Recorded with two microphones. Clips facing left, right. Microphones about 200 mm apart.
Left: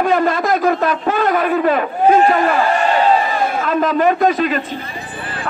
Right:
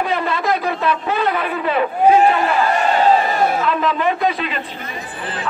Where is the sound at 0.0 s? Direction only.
45° left (ahead or behind).